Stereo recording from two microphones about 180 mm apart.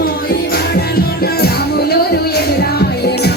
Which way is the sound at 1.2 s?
60° left (ahead or behind).